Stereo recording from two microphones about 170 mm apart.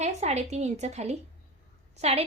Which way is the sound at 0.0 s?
40° right (ahead or behind).